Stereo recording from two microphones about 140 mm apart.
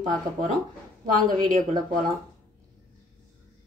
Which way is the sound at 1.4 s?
70° right (ahead or behind).